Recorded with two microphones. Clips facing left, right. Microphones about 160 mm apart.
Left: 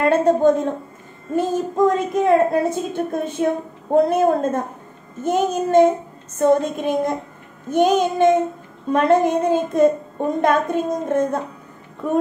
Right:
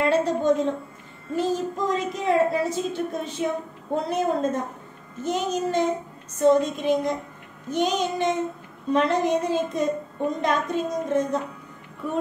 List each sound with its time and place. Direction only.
0.0 s a woman's voice: 50° left (ahead or behind)